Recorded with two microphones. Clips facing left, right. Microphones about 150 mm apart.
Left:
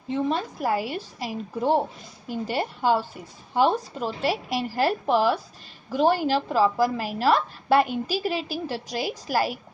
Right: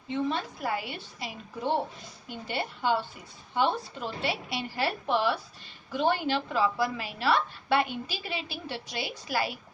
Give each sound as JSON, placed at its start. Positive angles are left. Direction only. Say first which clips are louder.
{"t": 0.3, "sound": "a woman's voice", "louder": "left 6 dB", "side_deg": 40}